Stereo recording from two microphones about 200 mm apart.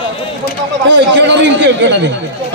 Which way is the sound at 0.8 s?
60° right (ahead or behind).